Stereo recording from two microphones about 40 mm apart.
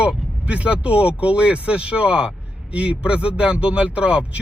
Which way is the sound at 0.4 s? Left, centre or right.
Right.